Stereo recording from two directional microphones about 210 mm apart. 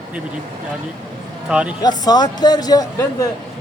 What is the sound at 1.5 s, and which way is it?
Speech, 5° right (ahead or behind).